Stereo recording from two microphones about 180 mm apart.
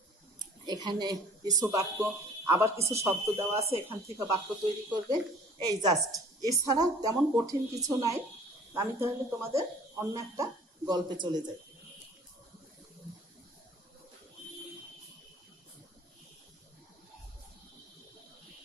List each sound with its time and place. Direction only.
0.4 s a woman's voice: 25° right (ahead or behind)